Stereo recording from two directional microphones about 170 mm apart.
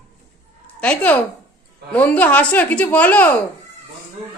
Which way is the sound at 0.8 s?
10° left (ahead or behind).